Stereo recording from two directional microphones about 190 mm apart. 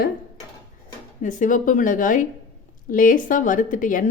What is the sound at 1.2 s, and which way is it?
Speech, 40° left (ahead or behind).